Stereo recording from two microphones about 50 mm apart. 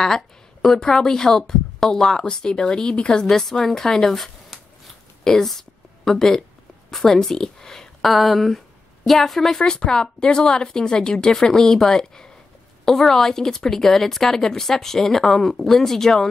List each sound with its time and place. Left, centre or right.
0.0 s speech: centre
5.2 s a sound: centre
6.9 s a woman's voice: centre
9.6 s speech: centre